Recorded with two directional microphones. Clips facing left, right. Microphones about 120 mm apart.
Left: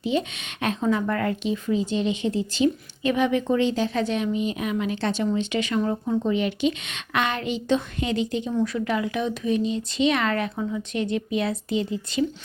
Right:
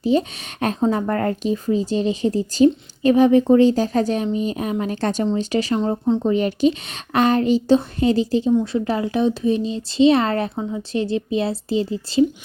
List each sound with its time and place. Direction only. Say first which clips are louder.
0.0 s speech: right 6 dB; 40° right (ahead or behind)